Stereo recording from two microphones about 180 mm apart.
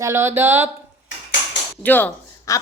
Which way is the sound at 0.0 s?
15° right (ahead or behind).